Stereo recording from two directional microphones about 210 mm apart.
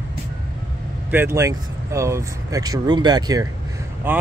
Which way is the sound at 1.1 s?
10° right (ahead or behind).